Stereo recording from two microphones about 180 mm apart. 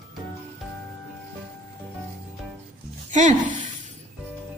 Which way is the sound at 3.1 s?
45° right (ahead or behind).